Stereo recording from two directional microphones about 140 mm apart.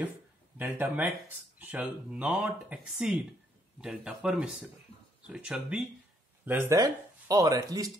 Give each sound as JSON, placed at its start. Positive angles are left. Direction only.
{"t": 0.6, "sound": "speech", "side_deg": -10}
{"t": 6.8, "sound": "speech", "side_deg": -25}